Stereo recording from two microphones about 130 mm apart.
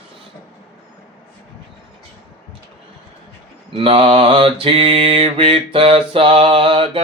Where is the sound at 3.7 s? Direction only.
45° right (ahead or behind).